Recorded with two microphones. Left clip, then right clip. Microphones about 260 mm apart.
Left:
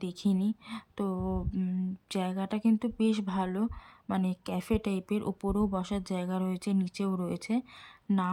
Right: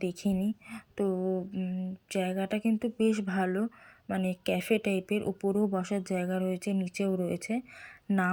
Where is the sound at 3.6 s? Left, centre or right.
Left.